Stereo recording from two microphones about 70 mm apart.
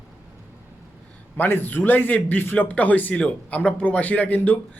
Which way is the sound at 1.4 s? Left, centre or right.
Left.